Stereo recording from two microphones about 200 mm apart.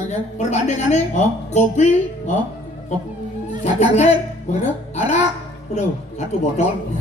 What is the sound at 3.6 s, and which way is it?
A woman's voice, 35° left (ahead or behind).